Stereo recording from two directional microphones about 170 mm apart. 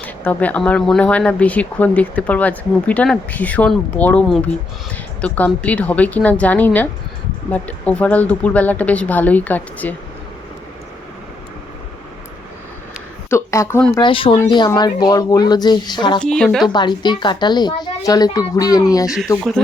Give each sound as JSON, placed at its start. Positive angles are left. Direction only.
{"t": 0.0, "sound": "speech", "side_deg": 10}
{"t": 13.3, "sound": "speech", "side_deg": 15}
{"t": 14.0, "sound": "a child's voice", "side_deg": 30}
{"t": 16.2, "sound": "speech", "side_deg": 5}
{"t": 16.7, "sound": "a child's voice", "side_deg": 25}
{"t": 19.0, "sound": "speech", "side_deg": -5}